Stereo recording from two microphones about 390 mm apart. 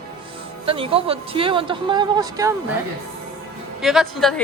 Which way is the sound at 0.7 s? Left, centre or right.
Centre.